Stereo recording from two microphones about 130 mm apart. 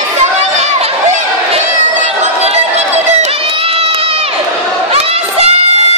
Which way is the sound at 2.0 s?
55° right (ahead or behind).